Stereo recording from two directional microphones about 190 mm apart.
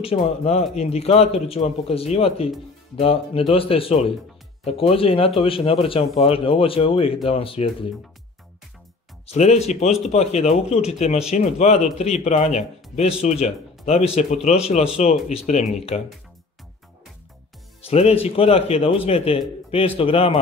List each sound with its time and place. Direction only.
0.0 s speech: 30° left (ahead or behind)
9.2 s speech: 35° left (ahead or behind)
17.8 s speech: 30° left (ahead or behind)